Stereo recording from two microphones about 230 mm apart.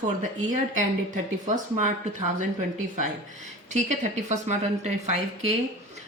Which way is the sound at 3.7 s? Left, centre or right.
Right.